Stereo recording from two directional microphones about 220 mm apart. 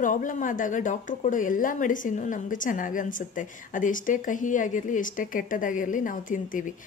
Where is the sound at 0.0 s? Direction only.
35° left (ahead or behind).